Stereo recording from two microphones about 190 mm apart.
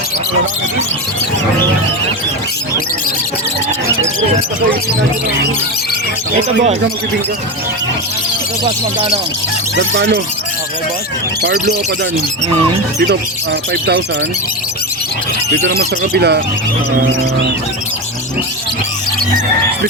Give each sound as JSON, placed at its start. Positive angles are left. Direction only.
{"t": 8.6, "sound": "speech", "side_deg": -30}
{"t": 9.7, "sound": "speech", "side_deg": -70}
{"t": 15.4, "sound": "speech", "side_deg": -55}